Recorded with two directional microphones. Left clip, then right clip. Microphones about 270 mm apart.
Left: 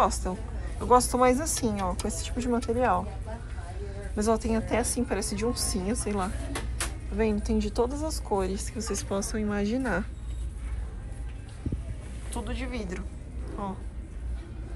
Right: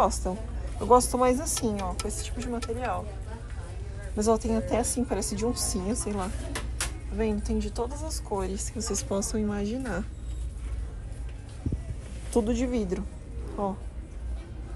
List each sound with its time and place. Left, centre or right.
0.0 s a woman's voice: centre
1.8 s speech: centre
4.1 s a woman's voice: centre
12.4 s speech: right